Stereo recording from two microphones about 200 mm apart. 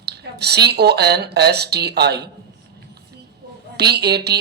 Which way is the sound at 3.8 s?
55° right (ahead or behind).